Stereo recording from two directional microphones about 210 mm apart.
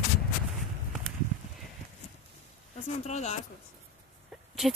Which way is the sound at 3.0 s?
35° left (ahead or behind).